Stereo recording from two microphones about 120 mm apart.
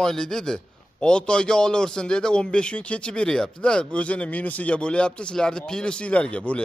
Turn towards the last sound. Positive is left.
turn(degrees=10)  # may be behind; listen again after turning